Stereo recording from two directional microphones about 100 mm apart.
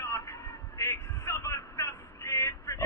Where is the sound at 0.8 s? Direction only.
30° left (ahead or behind).